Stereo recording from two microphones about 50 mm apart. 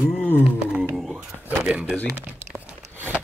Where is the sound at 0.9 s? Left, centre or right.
Centre.